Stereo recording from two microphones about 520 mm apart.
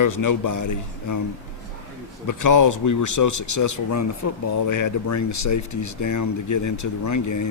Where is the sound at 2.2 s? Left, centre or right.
Left.